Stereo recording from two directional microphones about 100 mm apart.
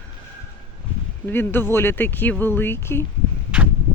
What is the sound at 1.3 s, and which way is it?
Speech, 20° left (ahead or behind).